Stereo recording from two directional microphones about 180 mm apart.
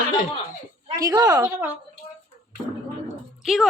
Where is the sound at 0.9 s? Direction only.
20° right (ahead or behind).